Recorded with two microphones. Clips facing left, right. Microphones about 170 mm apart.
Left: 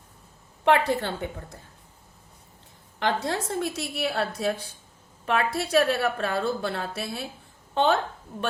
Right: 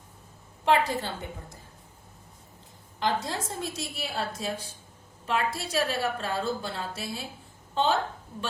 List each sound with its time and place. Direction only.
0.6 s a woman's voice: 60° left (ahead or behind)
3.0 s a woman's voice: 60° left (ahead or behind)